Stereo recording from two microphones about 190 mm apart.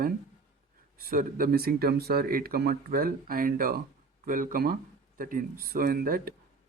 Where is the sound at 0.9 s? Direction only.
50° right (ahead or behind).